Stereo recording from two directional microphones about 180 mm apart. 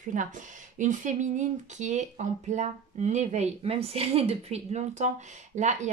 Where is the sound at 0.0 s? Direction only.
45° right (ahead or behind).